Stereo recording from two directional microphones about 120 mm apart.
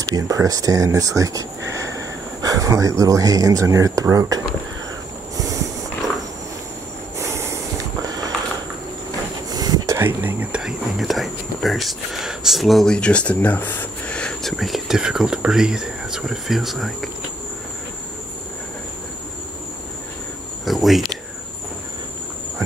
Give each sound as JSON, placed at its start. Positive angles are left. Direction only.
{"t": 0.1, "sound": "speech", "side_deg": -30}
{"t": 7.2, "sound": "snort", "side_deg": -25}
{"t": 9.5, "sound": "a sound", "side_deg": -35}
{"t": 9.9, "sound": "speech", "side_deg": -15}
{"t": 20.6, "sound": "cricket", "side_deg": 0}